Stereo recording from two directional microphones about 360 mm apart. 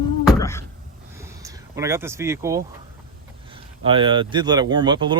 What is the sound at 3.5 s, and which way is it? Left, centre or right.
Speech, centre.